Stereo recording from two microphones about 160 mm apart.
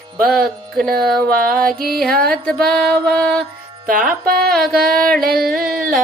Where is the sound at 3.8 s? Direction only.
60° right (ahead or behind).